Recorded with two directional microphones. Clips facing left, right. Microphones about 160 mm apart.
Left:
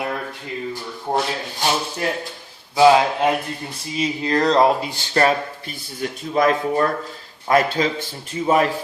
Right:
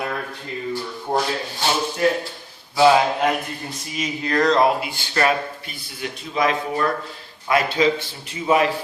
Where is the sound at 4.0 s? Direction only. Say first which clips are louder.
Left 1 dB; 30° left (ahead or behind).